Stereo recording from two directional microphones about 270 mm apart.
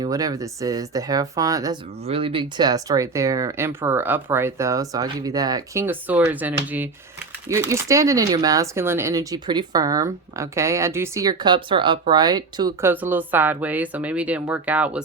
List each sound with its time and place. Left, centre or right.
0.0 s speech: centre